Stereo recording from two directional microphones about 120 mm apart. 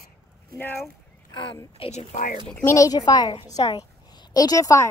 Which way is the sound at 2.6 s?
25° left (ahead or behind).